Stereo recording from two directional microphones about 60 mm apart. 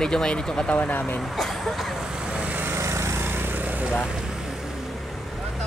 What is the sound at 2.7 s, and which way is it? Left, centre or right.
Lawn mower, right.